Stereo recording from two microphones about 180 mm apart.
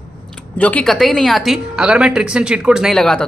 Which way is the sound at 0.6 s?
10° left (ahead or behind).